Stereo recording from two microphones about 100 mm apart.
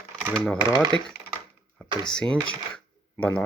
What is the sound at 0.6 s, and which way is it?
Speech, 50° right (ahead or behind).